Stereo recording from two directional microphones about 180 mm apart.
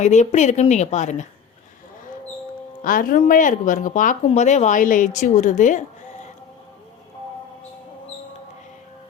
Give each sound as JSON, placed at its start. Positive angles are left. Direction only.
{"t": 0.0, "sound": "a woman's voice", "side_deg": 40}
{"t": 2.8, "sound": "a woman's voice", "side_deg": 50}